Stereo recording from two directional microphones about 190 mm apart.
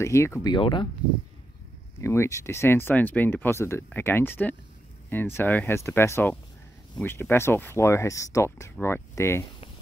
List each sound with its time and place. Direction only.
0.0 s speech: 15° left (ahead or behind)
2.0 s speech: 15° left (ahead or behind)